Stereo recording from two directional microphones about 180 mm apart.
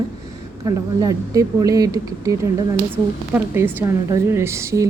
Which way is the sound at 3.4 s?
15° right (ahead or behind).